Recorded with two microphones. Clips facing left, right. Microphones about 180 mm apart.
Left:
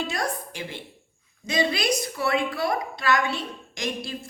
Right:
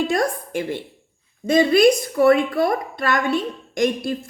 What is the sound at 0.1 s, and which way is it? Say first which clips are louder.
A woman's voice: right 8 dB; 50° right (ahead or behind).